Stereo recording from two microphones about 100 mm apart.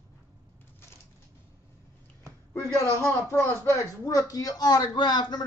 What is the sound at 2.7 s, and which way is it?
Speech, 30° left (ahead or behind).